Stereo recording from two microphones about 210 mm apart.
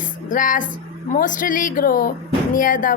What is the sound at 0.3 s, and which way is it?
Speech, 40° left (ahead or behind).